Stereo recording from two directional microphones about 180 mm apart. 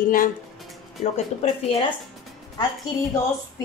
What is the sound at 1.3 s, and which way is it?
Speech, 35° left (ahead or behind).